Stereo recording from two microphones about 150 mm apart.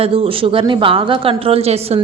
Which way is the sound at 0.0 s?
40° right (ahead or behind).